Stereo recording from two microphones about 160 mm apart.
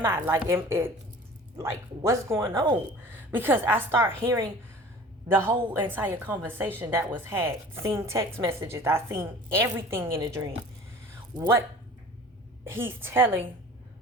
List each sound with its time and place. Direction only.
0.0 s a woman's voice: 15° right (ahead or behind)
2.0 s a woman's voice: 15° right (ahead or behind)
11.1 s a sound: 15° right (ahead or behind)
12.6 s a woman's voice: 15° right (ahead or behind)